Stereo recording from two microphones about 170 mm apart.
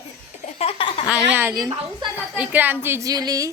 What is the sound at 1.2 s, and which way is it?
A woman's voice, 10° right (ahead or behind).